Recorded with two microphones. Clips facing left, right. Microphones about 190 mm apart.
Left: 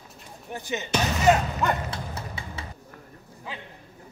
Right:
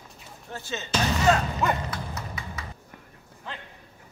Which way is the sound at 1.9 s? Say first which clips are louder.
Even; 30° left (ahead or behind).